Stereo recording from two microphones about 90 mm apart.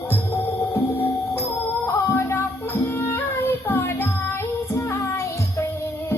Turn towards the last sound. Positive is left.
turn(degrees=30)  # may be behind; listen again after turning